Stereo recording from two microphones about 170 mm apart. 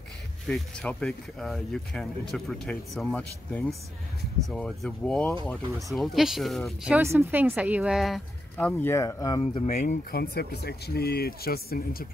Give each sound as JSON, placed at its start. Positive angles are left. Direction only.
{"t": 0.5, "sound": "speech", "side_deg": 5}
{"t": 6.8, "sound": "speech", "side_deg": -10}
{"t": 9.4, "sound": "speech", "side_deg": 35}
{"t": 10.1, "sound": "speech", "side_deg": 65}